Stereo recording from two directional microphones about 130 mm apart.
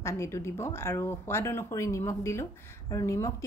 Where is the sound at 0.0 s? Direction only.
20° left (ahead or behind).